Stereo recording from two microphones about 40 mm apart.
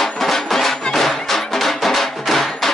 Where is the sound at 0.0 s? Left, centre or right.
Centre.